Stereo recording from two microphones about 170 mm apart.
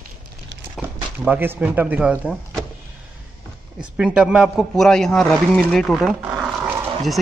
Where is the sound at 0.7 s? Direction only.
5° right (ahead or behind).